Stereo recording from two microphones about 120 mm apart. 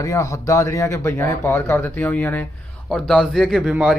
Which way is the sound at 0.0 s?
25° left (ahead or behind).